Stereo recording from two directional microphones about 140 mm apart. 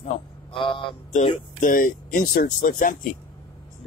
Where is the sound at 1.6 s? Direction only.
75° left (ahead or behind).